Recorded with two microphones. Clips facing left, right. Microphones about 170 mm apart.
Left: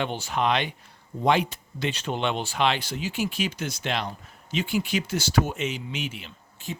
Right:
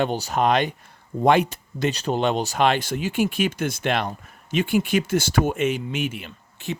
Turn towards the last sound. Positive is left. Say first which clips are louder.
# right 5 dB
turn(degrees=-65)  # may be behind; listen again after turning